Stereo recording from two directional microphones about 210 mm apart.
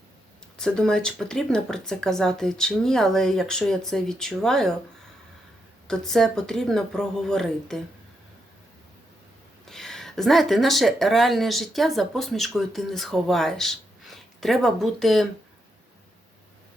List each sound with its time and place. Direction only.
0.5 s speech: 5° left (ahead or behind)
6.1 s speech: centre (ahead or behind)
9.6 s speech: centre (ahead or behind)